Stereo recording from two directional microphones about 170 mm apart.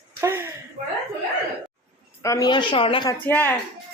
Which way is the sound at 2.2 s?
20° left (ahead or behind).